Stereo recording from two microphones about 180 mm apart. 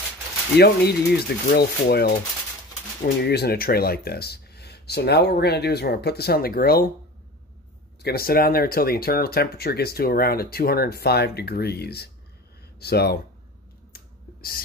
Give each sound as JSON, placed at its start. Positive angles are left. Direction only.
{"t": 0.6, "sound": "speech", "side_deg": 60}
{"t": 3.2, "sound": "speech", "side_deg": 65}
{"t": 8.0, "sound": "speech", "side_deg": 60}
{"t": 13.9, "sound": "finger snapping", "side_deg": 55}